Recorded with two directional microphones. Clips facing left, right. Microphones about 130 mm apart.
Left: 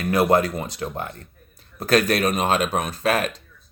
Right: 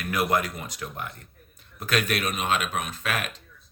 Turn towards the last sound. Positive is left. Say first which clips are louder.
# left 9 dB
turn(degrees=35)  # may be behind; listen again after turning